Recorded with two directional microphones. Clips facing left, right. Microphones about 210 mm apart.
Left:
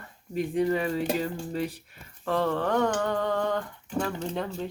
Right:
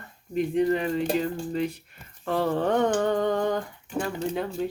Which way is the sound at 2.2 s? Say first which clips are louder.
Right 1 dB; 10° right (ahead or behind).